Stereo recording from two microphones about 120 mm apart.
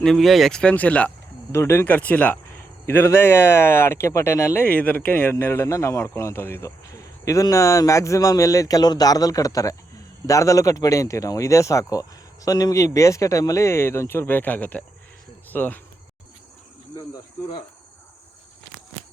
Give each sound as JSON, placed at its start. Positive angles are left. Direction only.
{"t": 0.0, "sound": "speech", "side_deg": 0}
{"t": 4.6, "sound": "speech", "side_deg": 15}
{"t": 16.9, "sound": "cricket", "side_deg": 30}